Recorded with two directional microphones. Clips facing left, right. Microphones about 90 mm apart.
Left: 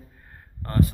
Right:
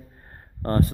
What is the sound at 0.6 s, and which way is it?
Speech, 40° right (ahead or behind).